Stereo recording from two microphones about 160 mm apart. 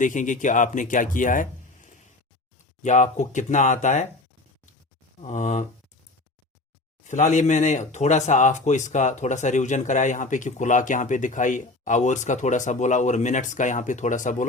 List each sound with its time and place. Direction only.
0.0 s speech: 50° left (ahead or behind)
5.2 s speech: 50° left (ahead or behind)
7.0 s speech: 50° left (ahead or behind)